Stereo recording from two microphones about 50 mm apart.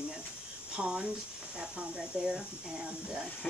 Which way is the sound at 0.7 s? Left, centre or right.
Centre.